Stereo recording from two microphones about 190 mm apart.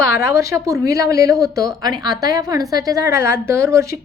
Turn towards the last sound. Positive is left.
turn(degrees=-15)  # may be behind; listen again after turning